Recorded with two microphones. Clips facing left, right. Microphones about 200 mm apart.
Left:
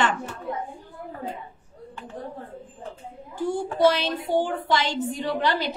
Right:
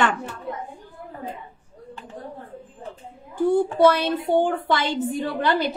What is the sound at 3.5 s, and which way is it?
A woman's voice, 55° right (ahead or behind).